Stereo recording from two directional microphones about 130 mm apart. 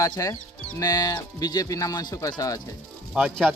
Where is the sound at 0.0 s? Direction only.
25° left (ahead or behind).